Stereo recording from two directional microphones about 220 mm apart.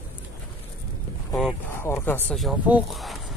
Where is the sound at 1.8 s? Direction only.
10° left (ahead or behind).